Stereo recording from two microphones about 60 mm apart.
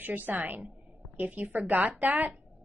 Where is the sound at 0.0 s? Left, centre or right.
Right.